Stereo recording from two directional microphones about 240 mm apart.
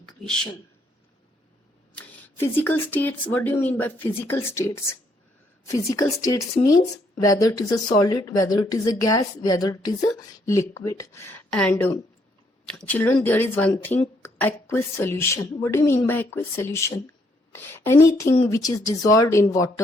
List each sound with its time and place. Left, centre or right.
2.0 s speech: centre